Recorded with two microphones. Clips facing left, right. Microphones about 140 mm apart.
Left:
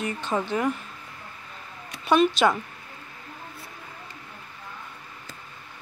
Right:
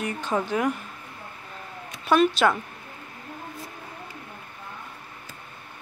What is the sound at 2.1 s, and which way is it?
Speech, centre (ahead or behind).